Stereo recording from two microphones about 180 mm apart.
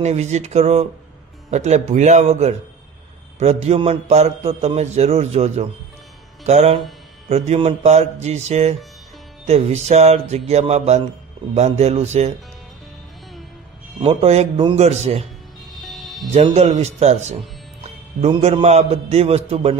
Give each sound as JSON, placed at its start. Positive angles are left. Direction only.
{"t": 0.0, "sound": "a man's voice", "side_deg": -40}
{"t": 3.6, "sound": "a man's voice", "side_deg": -35}
{"t": 13.9, "sound": "a man's voice", "side_deg": -35}
{"t": 15.8, "sound": "music", "side_deg": 0}
{"t": 16.3, "sound": "a man's voice", "side_deg": -35}